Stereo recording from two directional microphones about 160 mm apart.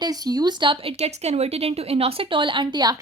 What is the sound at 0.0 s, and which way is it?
Speech, 25° right (ahead or behind).